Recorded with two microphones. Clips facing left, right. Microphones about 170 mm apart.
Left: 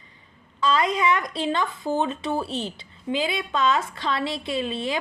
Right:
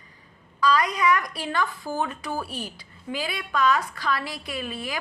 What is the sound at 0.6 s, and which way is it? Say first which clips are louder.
Speech: even; 25° left (ahead or behind).